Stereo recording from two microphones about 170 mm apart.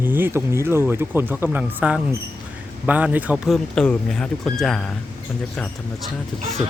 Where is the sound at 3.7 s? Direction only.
5° left (ahead or behind).